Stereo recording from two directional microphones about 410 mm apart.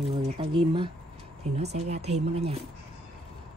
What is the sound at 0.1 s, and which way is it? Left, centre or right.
Speech, centre.